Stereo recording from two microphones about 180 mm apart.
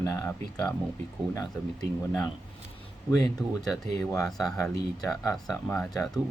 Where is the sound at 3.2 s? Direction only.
Centre (ahead or behind).